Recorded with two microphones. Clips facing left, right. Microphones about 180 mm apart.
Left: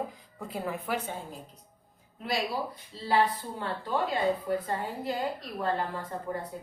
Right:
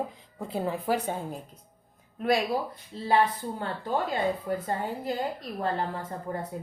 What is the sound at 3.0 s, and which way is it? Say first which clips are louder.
Speech: right 2 dB; 45° right (ahead or behind).